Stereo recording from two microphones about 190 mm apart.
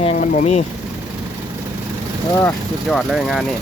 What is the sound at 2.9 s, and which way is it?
Speech, centre (ahead or behind).